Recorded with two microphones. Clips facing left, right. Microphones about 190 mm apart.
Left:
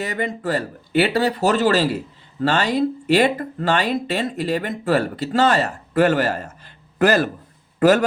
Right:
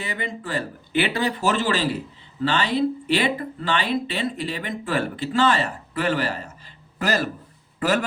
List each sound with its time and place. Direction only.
0.0 s speech: 45° left (ahead or behind)